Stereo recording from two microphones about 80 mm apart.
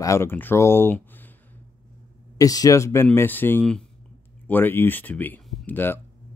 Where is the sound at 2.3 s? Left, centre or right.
Left.